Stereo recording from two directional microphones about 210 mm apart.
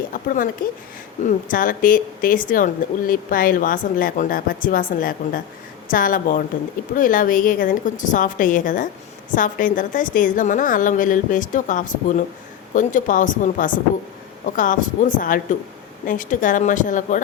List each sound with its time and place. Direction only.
0.1 s a woman's voice: 40° left (ahead or behind)